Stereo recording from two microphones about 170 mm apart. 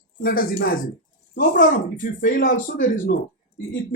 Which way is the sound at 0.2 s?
60° left (ahead or behind).